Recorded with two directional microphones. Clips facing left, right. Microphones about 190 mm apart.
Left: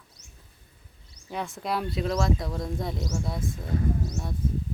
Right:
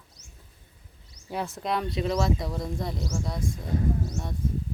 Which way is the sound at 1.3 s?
5° right (ahead or behind).